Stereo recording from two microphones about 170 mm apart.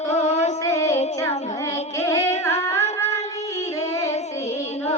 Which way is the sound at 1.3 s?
40° left (ahead or behind).